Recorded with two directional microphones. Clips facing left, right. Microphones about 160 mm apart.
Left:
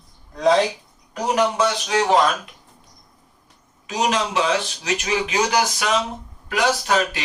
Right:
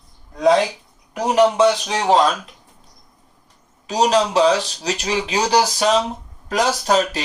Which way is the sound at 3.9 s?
35° right (ahead or behind).